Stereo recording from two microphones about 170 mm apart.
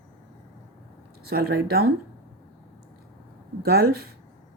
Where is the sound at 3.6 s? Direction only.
65° right (ahead or behind).